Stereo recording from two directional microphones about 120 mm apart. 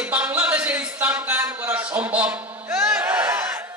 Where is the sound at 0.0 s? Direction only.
15° right (ahead or behind).